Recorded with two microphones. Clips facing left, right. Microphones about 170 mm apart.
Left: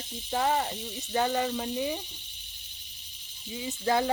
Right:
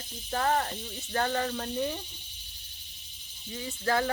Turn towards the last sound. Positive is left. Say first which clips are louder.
# left 2 dB
turn(degrees=15)  # may be behind; listen again after turning